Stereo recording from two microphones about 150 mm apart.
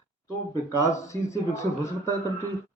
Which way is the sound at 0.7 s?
20° left (ahead or behind).